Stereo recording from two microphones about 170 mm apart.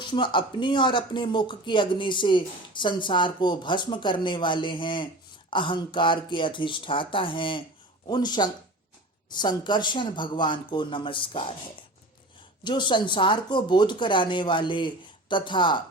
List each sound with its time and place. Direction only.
0.0 s speech: 30° left (ahead or behind)
12.6 s speech: 30° left (ahead or behind)